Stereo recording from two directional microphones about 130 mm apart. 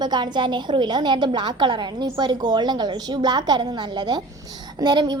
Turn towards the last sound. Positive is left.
turn(degrees=-30)  # may be behind; listen again after turning